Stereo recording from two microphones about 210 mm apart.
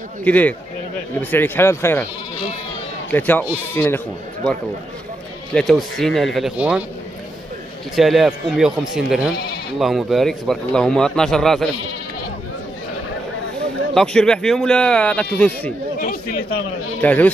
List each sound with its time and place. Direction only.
0.2 s speech: 5° left (ahead or behind)
3.1 s speech: 10° left (ahead or behind)
5.5 s a man's voice: centre (ahead or behind)
7.9 s a man's voice: centre (ahead or behind)
13.9 s a man's voice: 5° left (ahead or behind)
17.0 s speech: 5° left (ahead or behind)